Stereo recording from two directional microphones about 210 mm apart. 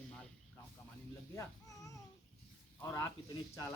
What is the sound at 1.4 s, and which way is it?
Speech, 15° left (ahead or behind).